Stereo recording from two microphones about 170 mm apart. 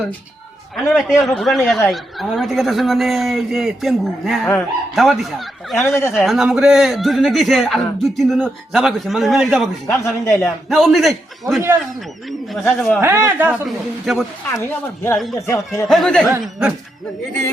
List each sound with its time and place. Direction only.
0.8 s speech: centre (ahead or behind)
5.8 s speech: 15° left (ahead or behind)
6.1 s speech: centre (ahead or behind)
10.2 s speech: 15° left (ahead or behind)
10.7 s speech: centre (ahead or behind)
12.6 s speech: 10° left (ahead or behind)
13.0 s a man's voice: 15° right (ahead or behind)
13.7 s speech: centre (ahead or behind)
14.6 s speech: 15° left (ahead or behind)
15.9 s speech: 5° left (ahead or behind)